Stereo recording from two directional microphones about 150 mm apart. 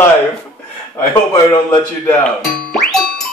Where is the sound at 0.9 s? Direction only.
25° left (ahead or behind).